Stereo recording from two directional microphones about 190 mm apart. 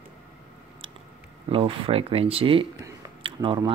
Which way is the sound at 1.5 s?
30° right (ahead or behind).